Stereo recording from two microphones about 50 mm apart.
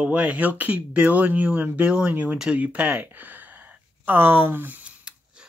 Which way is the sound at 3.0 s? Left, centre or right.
Right.